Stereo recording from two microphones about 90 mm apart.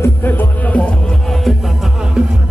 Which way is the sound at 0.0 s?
20° left (ahead or behind).